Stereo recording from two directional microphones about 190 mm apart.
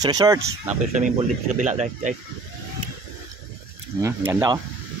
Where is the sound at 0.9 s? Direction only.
40° right (ahead or behind).